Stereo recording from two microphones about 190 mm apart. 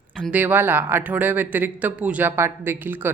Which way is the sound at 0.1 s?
10° right (ahead or behind).